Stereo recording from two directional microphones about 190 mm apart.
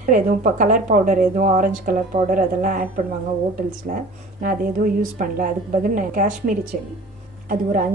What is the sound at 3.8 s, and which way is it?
A woman's voice, 45° right (ahead or behind).